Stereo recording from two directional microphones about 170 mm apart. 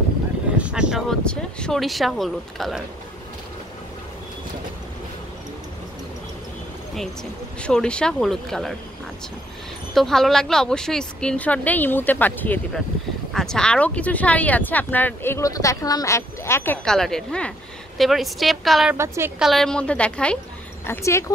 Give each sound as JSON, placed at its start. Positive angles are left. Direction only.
{"t": 0.6, "sound": "speech", "side_deg": -5}
{"t": 7.6, "sound": "speech", "side_deg": 5}
{"t": 9.9, "sound": "speech", "side_deg": 0}
{"t": 18.9, "sound": "a woman's voice", "side_deg": -15}
{"t": 19.3, "sound": "speech", "side_deg": 0}